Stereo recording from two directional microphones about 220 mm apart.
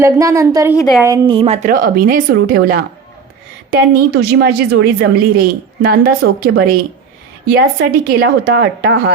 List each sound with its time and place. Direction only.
0.0 s a woman's voice: 15° right (ahead or behind)
1.6 s a woman's voice: 40° right (ahead or behind)